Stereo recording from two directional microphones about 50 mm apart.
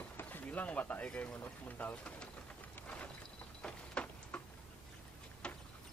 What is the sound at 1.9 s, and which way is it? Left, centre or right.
Speech, left.